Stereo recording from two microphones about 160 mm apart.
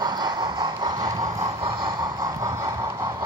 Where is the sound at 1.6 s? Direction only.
30° right (ahead or behind).